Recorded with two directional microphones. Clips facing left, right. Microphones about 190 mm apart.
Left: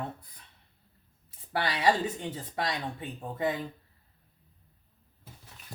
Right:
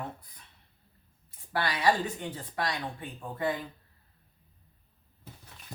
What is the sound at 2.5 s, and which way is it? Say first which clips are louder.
Speech: even; 20° left (ahead or behind).